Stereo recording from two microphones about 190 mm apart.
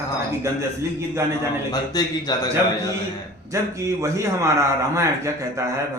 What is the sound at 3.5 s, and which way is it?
A man's voice, 15° right (ahead or behind).